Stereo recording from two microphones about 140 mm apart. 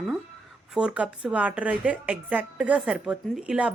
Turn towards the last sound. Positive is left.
turn(degrees=-5)  # may be behind; listen again after turning